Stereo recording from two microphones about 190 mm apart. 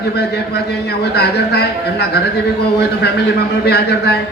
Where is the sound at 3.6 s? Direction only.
60° left (ahead or behind).